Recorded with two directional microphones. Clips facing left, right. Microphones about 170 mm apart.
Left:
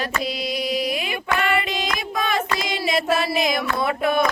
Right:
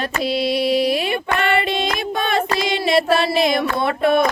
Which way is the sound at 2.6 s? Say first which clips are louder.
Right 6 dB; 30° right (ahead or behind).